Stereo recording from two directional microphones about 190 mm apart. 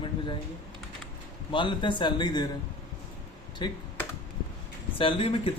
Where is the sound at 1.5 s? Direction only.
25° left (ahead or behind).